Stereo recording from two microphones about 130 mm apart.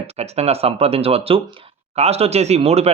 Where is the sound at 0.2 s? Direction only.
55° right (ahead or behind).